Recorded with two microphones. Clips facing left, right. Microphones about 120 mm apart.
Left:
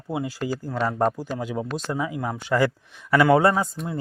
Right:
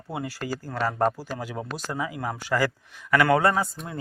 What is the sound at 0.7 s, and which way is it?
Speech, centre (ahead or behind).